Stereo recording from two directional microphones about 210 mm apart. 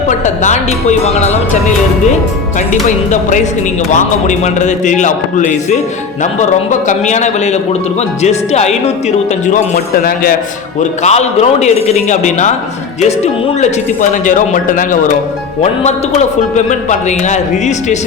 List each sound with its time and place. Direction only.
0.1 s a man's voice: 35° left (ahead or behind)
2.8 s a man's voice: 35° left (ahead or behind)
11.0 s a man's voice: 30° left (ahead or behind)